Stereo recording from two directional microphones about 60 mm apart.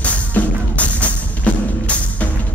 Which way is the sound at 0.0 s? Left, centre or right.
Left.